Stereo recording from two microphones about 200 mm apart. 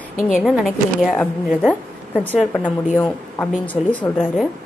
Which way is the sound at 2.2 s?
10° left (ahead or behind).